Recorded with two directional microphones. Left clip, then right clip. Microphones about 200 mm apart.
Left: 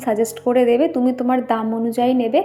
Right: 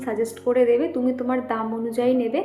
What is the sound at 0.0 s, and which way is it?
A woman's voice, 40° left (ahead or behind).